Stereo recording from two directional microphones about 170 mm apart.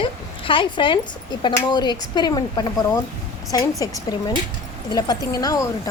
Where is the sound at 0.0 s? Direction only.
30° left (ahead or behind).